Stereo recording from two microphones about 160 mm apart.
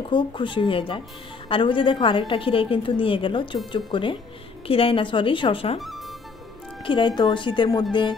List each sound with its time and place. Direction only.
0.1 s a woman's voice: 30° left (ahead or behind)
5.8 s music: centre (ahead or behind)
6.8 s a woman's voice: 30° left (ahead or behind)